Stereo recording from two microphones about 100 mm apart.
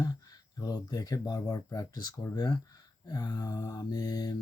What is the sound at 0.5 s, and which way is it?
Speech, 40° left (ahead or behind).